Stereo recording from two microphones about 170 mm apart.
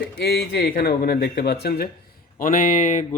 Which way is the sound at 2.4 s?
50° left (ahead or behind).